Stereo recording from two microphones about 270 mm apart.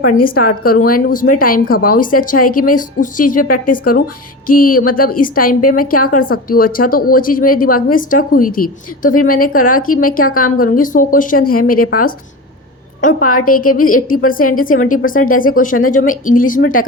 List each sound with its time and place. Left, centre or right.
0.1 s speech: left
13.0 s speech: left